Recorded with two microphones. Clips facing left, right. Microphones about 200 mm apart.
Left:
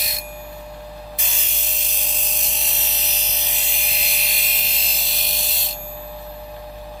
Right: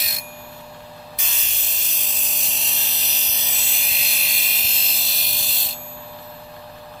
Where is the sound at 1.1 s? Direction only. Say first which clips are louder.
Left 4 dB; centre (ahead or behind).